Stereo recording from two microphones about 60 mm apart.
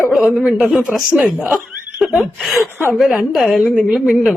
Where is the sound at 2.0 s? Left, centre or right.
Centre.